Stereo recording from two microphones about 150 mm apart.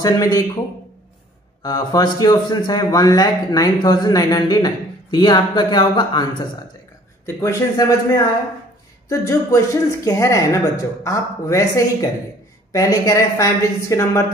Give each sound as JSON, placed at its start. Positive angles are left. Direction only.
{"t": 0.0, "sound": "speech", "side_deg": 25}
{"t": 1.6, "sound": "speech", "side_deg": 25}
{"t": 7.2, "sound": "speech", "side_deg": 20}